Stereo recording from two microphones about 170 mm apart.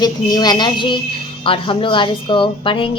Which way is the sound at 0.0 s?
25° left (ahead or behind).